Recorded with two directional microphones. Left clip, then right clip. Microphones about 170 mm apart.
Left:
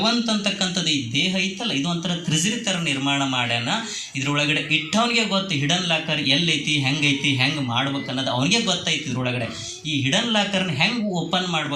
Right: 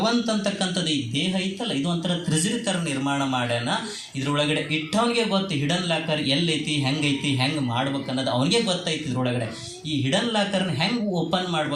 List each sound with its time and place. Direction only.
0.0 s a man's voice: 45° right (ahead or behind)
10.1 s a man's voice: 45° right (ahead or behind)